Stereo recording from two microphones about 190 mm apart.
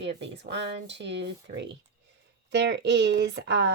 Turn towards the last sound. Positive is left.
turn(degrees=-70)  # may be behind; listen again after turning